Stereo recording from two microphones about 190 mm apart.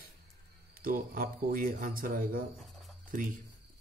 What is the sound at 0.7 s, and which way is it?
Speech, 50° right (ahead or behind).